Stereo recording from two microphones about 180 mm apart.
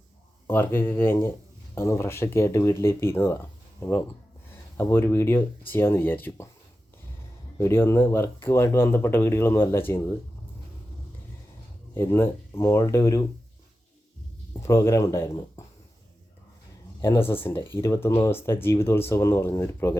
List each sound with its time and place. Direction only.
0.4 s speech: 10° left (ahead or behind)
7.6 s speech: 15° left (ahead or behind)
11.9 s speech: 15° left (ahead or behind)
14.6 s speech: 15° left (ahead or behind)
17.0 s speech: 15° left (ahead or behind)